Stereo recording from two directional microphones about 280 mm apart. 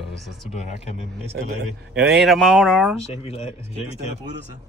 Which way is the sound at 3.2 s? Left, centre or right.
Left.